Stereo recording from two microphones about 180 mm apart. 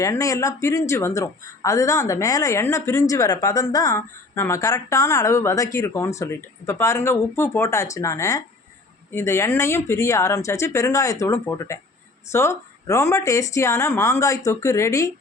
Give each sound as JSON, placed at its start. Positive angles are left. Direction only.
{"t": 0.0, "sound": "a woman's voice", "side_deg": 20}